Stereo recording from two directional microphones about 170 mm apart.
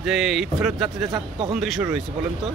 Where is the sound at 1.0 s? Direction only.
25° right (ahead or behind).